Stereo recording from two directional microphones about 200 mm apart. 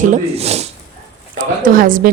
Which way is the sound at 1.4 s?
45° right (ahead or behind).